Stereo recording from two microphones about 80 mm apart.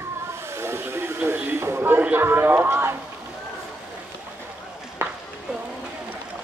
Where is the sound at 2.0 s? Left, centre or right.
Right.